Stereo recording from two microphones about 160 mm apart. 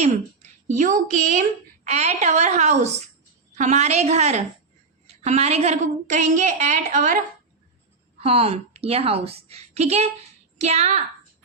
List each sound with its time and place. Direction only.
0.7 s a woman's voice: 55° right (ahead or behind)
8.2 s a woman's voice: 35° right (ahead or behind)